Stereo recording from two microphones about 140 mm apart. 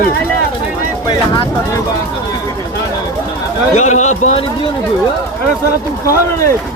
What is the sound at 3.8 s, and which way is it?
Speech, 55° left (ahead or behind).